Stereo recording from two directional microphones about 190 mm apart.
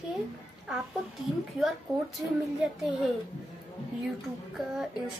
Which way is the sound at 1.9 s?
15° right (ahead or behind).